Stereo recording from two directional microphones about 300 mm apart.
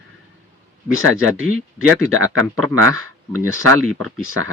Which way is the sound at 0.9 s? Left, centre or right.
Right.